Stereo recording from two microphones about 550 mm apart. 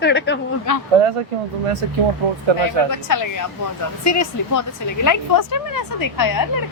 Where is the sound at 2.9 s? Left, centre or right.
Left.